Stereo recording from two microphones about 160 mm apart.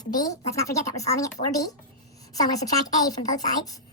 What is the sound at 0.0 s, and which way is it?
A woman's voice, 25° left (ahead or behind).